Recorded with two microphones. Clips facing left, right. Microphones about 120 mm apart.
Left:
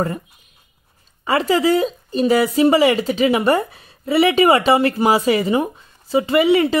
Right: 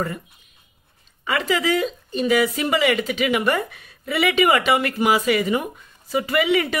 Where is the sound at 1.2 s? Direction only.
35° left (ahead or behind).